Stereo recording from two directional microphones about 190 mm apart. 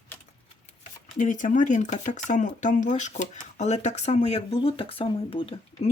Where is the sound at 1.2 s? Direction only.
40° left (ahead or behind).